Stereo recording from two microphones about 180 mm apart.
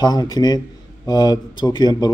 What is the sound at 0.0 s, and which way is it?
A man's voice, 20° left (ahead or behind).